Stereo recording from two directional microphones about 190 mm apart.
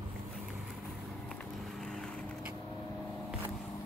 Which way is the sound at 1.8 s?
5° left (ahead or behind).